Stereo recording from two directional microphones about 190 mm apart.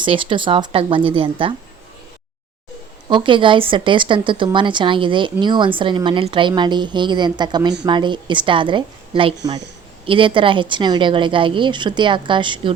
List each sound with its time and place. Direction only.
0.0 s a woman's voice: 25° right (ahead or behind)
3.1 s a woman's voice: 25° right (ahead or behind)